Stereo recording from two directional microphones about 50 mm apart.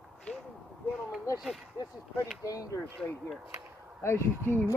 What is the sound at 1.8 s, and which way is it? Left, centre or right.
Speech, left.